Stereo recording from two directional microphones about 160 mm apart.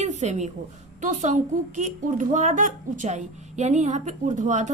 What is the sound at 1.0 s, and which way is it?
A woman's voice, 50° right (ahead or behind).